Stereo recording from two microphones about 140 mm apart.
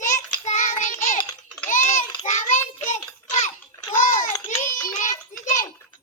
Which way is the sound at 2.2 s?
60° left (ahead or behind).